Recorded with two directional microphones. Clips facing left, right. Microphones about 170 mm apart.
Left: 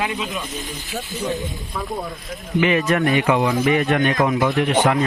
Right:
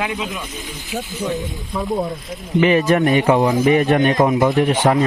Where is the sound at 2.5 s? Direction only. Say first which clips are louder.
Right 4 dB; 35° right (ahead or behind).